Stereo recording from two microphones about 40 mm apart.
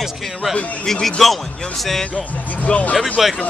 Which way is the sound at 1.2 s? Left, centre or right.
Centre.